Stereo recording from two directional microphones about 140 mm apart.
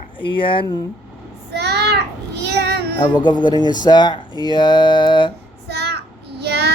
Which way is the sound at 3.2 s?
35° left (ahead or behind).